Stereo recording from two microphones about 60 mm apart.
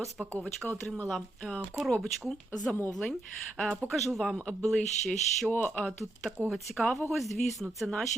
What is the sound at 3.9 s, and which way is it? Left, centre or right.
Speech, centre.